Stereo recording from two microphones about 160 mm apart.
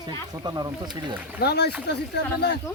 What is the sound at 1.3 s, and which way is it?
Speech, 90° left.